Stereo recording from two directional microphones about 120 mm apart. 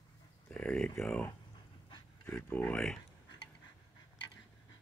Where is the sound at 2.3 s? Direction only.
15° left (ahead or behind).